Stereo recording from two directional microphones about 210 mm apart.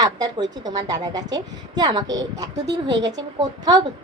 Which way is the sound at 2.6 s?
55° right (ahead or behind).